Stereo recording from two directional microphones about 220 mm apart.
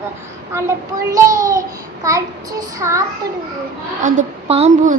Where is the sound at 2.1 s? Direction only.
15° right (ahead or behind).